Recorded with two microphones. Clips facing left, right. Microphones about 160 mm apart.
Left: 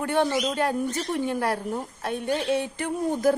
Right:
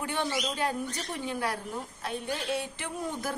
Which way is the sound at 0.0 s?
50° left (ahead or behind).